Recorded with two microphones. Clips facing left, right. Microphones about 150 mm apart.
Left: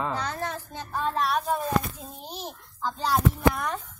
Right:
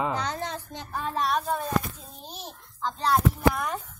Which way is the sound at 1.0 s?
Centre (ahead or behind).